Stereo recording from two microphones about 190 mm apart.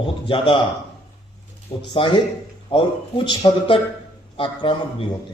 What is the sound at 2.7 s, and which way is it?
A man's voice, 25° left (ahead or behind).